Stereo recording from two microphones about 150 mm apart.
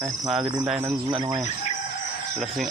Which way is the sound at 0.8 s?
30° right (ahead or behind).